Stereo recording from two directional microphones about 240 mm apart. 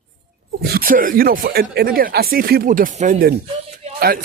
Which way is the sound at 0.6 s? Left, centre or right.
Right.